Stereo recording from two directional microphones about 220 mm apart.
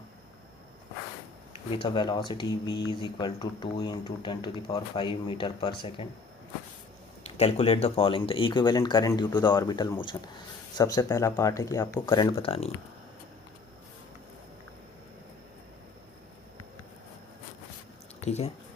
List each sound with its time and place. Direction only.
1.8 s speech: 20° left (ahead or behind)
7.3 s speech: 30° left (ahead or behind)
18.2 s speech: 30° left (ahead or behind)